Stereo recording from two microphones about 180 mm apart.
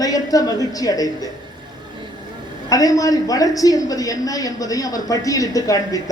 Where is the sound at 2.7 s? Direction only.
20° left (ahead or behind).